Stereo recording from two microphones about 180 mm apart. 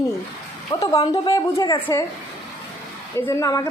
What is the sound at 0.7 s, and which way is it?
A woman's voice, 25° left (ahead or behind).